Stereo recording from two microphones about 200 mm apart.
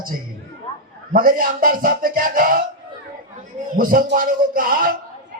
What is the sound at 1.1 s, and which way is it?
A man's voice, 45° right (ahead or behind).